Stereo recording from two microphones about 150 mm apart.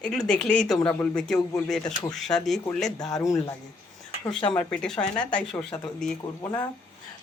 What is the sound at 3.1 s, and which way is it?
Speech, 20° left (ahead or behind).